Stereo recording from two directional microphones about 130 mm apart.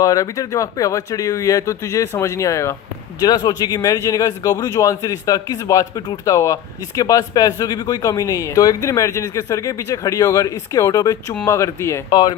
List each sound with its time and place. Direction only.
0.0 s a man's voice: 25° left (ahead or behind)
12.1 s speech: 30° left (ahead or behind)